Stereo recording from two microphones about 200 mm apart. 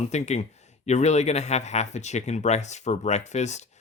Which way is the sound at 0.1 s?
35° left (ahead or behind).